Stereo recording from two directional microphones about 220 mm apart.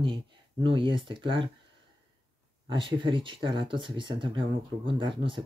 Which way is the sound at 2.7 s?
20° right (ahead or behind).